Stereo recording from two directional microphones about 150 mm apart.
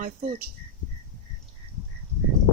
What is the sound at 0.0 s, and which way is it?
Speech, 75° right (ahead or behind).